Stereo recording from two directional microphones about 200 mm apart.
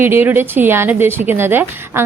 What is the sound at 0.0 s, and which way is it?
A woman's voice, 10° right (ahead or behind).